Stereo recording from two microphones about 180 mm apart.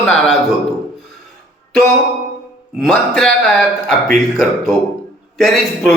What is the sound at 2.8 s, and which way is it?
Speech, centre (ahead or behind).